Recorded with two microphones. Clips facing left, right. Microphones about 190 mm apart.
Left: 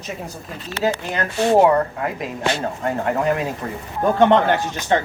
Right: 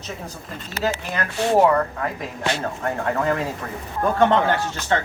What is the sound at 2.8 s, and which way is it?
Speech, 20° left (ahead or behind).